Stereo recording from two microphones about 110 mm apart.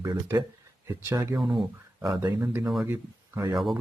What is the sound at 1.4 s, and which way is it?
Speech, centre (ahead or behind).